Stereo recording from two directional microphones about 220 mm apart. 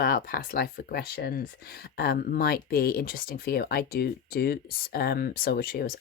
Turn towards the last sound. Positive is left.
turn(degrees=40)  # may be behind; listen again after turning